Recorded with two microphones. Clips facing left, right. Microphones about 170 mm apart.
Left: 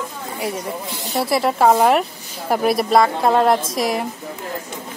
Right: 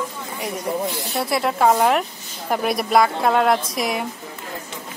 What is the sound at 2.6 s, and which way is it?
Speech, centre (ahead or behind).